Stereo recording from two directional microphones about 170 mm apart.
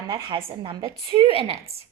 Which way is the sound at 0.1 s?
30° right (ahead or behind).